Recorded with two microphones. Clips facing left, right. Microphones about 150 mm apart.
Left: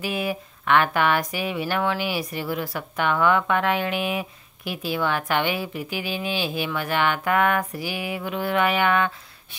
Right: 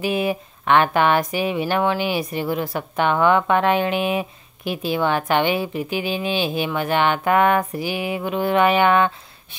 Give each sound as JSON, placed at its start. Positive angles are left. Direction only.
{"t": 0.0, "sound": "speech", "side_deg": -20}